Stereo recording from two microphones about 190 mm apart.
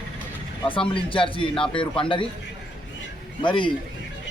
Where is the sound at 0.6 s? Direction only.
25° left (ahead or behind).